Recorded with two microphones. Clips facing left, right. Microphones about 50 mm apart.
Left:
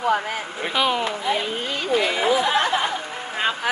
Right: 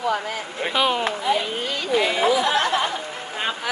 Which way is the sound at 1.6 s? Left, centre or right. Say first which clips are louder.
Even; left.